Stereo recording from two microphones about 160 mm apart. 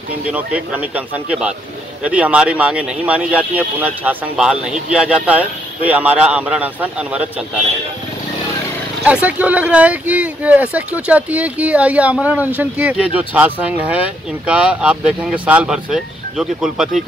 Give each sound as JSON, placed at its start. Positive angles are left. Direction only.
{"t": 0.3, "sound": "speech", "side_deg": -10}
{"t": 9.0, "sound": "speech", "side_deg": -10}